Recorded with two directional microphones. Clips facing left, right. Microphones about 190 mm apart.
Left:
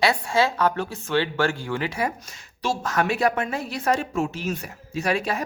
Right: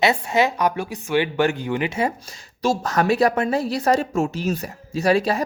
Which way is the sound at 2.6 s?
40° right (ahead or behind).